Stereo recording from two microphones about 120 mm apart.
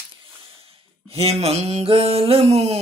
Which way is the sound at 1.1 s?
55° right (ahead or behind).